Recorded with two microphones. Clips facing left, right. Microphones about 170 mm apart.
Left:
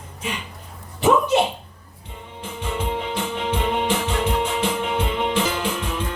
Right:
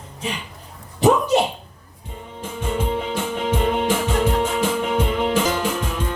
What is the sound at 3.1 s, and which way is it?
Music, 45° right (ahead or behind).